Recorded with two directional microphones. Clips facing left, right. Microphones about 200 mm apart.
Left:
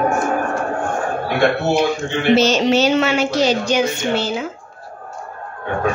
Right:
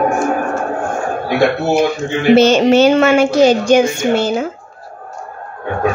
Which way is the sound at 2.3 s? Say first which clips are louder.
Right 6 dB; 55° right (ahead or behind).